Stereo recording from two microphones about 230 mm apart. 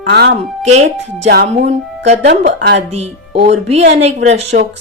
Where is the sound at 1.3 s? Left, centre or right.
Right.